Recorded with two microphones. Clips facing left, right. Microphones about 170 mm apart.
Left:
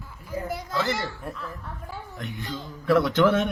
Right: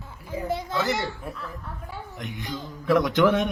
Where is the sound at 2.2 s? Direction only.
15° right (ahead or behind).